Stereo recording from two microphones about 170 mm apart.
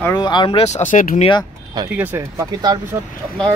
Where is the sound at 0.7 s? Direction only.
45° left (ahead or behind).